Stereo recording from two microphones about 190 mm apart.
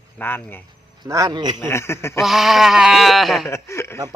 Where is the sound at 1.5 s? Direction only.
15° left (ahead or behind).